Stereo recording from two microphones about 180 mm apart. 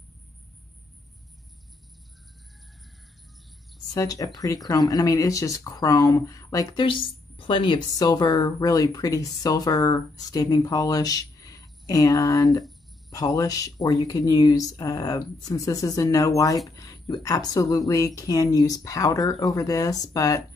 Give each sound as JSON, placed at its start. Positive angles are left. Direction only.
{"t": 3.9, "sound": "speech", "side_deg": 20}